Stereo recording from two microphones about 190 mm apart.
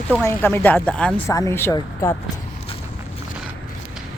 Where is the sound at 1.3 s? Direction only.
15° left (ahead or behind).